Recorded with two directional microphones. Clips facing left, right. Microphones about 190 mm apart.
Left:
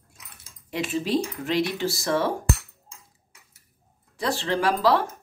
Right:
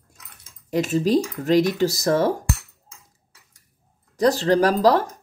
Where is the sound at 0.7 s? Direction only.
40° right (ahead or behind).